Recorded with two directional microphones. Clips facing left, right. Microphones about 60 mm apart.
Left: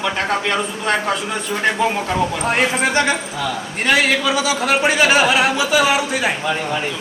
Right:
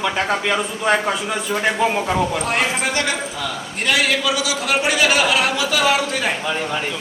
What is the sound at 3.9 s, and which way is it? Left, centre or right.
A man's voice, left.